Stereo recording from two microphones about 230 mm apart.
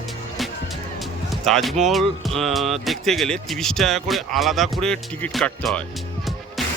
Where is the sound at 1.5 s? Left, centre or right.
Centre.